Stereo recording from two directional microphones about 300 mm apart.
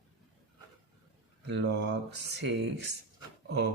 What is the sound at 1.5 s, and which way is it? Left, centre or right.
Speech, right.